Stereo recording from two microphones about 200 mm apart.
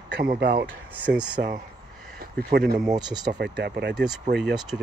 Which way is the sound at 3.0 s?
20° right (ahead or behind).